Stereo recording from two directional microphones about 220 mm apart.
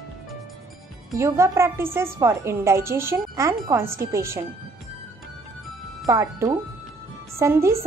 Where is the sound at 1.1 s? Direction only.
15° right (ahead or behind).